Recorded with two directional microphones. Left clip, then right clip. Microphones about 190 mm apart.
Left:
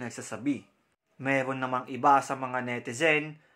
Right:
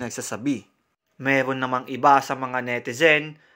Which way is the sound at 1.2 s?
25° right (ahead or behind).